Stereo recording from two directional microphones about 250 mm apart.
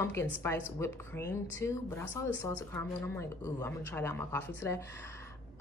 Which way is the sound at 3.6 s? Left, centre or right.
Centre.